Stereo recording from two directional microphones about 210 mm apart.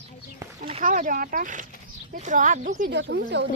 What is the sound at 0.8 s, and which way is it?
Speech, 40° right (ahead or behind).